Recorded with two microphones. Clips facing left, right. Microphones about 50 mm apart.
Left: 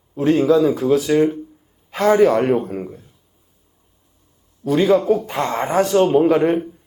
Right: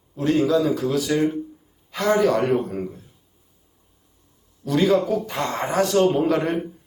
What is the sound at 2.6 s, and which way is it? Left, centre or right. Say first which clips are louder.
Speech: left 2 dB; centre.